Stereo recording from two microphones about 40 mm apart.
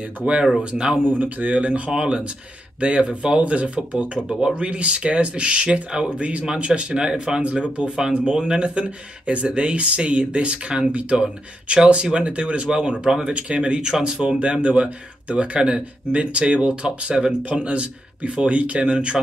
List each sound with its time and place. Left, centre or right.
0.2 s speech: right
1.2 s speech: right
1.9 s speech: centre
6.1 s speech: right
16.8 s speech: centre